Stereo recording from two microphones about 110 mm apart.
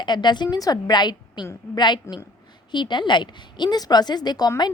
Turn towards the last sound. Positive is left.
turn(degrees=40)  # may be behind; listen again after turning